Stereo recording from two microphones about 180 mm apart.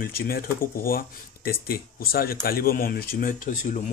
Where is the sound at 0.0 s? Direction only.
55° left (ahead or behind).